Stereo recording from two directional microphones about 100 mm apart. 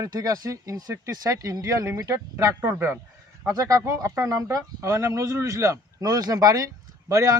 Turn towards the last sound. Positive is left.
turn(degrees=-30)  # may be behind; listen again after turning